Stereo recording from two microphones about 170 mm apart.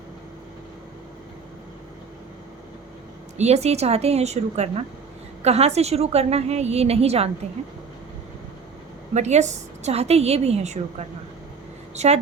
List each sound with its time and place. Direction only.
3.3 s a woman's voice: 40° right (ahead or behind)
9.1 s a woman's voice: 40° right (ahead or behind)